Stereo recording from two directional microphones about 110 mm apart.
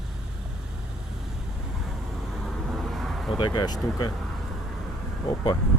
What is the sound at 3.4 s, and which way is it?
Speech, 40° left (ahead or behind).